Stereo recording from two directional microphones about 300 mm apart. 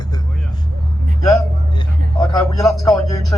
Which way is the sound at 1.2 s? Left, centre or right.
Centre.